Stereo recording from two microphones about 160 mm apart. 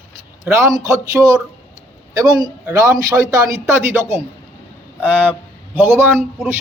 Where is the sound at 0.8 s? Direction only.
20° right (ahead or behind).